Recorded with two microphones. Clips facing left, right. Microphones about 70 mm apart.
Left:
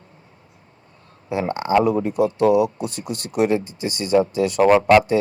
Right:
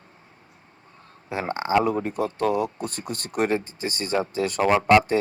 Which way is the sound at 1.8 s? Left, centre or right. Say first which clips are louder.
Left 6 dB; right.